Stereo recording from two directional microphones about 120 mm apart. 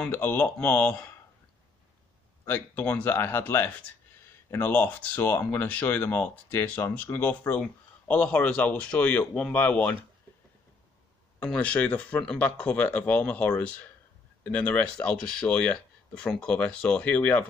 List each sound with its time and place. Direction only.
0.1 s speech: 15° left (ahead or behind)
2.4 s speech: 15° left (ahead or behind)
11.4 s speech: 10° left (ahead or behind)